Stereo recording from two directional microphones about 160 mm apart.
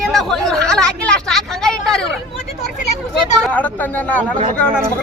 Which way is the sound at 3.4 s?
10° left (ahead or behind).